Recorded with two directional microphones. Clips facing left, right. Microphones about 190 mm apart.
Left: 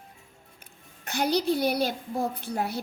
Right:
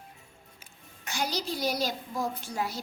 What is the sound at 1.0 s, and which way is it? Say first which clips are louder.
A woman's voice: left 7 dB; 55° left (ahead or behind).